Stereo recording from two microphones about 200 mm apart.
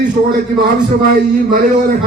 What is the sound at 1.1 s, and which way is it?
Speech, 45° right (ahead or behind).